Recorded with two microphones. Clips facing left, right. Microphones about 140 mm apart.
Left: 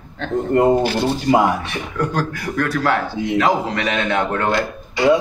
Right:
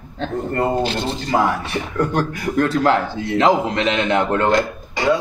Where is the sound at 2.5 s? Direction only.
20° right (ahead or behind).